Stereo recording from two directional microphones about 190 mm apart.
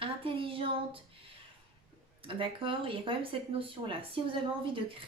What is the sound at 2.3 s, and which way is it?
Speech, 30° right (ahead or behind).